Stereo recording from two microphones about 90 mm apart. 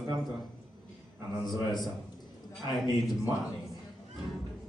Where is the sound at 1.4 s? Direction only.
50° left (ahead or behind).